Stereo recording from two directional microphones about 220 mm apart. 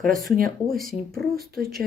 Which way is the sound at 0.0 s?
40° right (ahead or behind).